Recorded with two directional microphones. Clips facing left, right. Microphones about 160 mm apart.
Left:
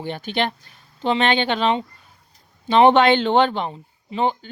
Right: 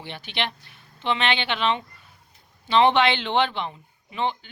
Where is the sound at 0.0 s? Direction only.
45° left (ahead or behind).